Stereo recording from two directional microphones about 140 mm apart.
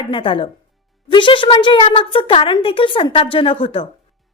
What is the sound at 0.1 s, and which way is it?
A woman's voice, 40° left (ahead or behind).